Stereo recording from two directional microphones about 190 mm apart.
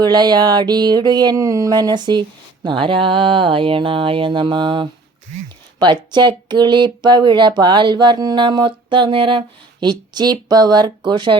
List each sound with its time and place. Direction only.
0.0 s speech: 20° right (ahead or behind)